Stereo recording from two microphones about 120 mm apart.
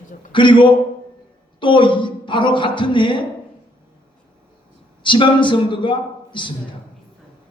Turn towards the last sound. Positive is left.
turn(degrees=40)  # may be behind; listen again after turning